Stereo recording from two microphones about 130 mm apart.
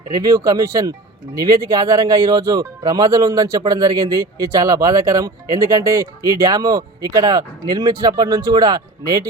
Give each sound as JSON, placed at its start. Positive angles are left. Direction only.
{"t": 0.1, "sound": "speech", "side_deg": -25}